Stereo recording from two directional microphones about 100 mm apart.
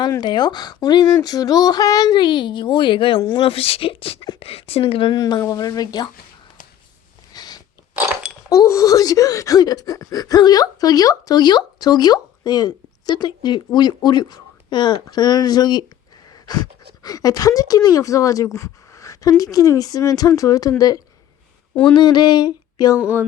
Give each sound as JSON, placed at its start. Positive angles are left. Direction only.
{"t": 0.2, "sound": "speech", "side_deg": 45}
{"t": 4.4, "sound": "speech", "side_deg": 80}
{"t": 5.1, "sound": "speech", "side_deg": 40}
{"t": 7.3, "sound": "a sound", "side_deg": 45}
{"t": 8.4, "sound": "speech", "side_deg": 35}
{"t": 17.0, "sound": "speech", "side_deg": 35}
{"t": 23.0, "sound": "a sound", "side_deg": -15}